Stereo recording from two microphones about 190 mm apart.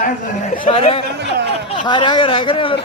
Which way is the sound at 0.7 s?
30° left (ahead or behind).